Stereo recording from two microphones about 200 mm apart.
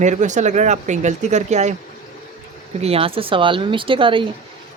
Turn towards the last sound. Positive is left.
turn(degrees=-25)  # may be behind; listen again after turning